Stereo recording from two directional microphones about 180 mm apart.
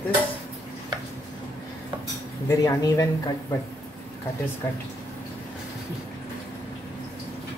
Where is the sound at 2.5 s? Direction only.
20° left (ahead or behind).